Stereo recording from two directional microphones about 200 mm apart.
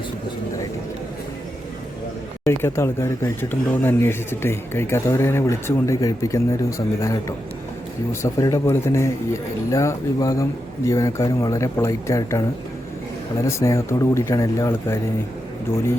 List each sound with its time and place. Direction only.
2.5 s speech: 15° left (ahead or behind)